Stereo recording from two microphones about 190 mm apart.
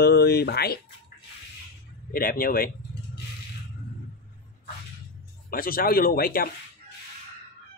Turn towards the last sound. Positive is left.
turn(degrees=50)  # may be behind; listen again after turning